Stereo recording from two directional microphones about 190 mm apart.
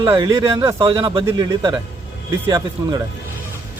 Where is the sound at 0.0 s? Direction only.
20° right (ahead or behind).